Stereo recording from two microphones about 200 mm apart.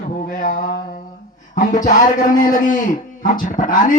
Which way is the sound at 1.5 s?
40° left (ahead or behind).